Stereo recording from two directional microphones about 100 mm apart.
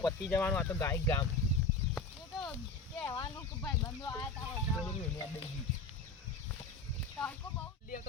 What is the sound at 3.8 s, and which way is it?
Speech, 30° left (ahead or behind).